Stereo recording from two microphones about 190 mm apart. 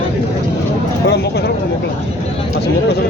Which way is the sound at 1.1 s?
60° left (ahead or behind).